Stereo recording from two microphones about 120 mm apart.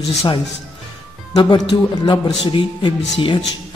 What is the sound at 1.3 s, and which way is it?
A man's voice, 40° left (ahead or behind).